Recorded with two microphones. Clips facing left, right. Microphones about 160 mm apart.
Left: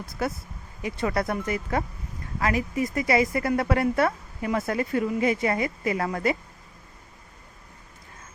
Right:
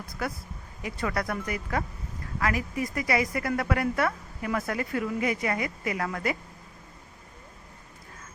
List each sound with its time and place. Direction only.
0.1 s a woman's voice: 25° left (ahead or behind)